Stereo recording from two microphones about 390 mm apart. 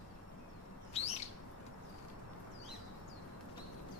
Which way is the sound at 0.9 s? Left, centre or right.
Centre.